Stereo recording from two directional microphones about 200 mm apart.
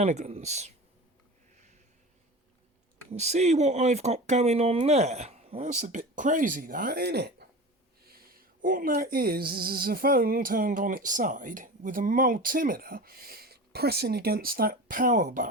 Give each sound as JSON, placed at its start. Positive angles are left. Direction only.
{"t": 0.0, "sound": "speech", "side_deg": -35}
{"t": 3.1, "sound": "speech", "side_deg": -35}